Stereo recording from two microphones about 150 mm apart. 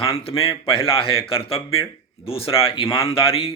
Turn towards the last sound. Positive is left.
turn(degrees=40)  # may be behind; listen again after turning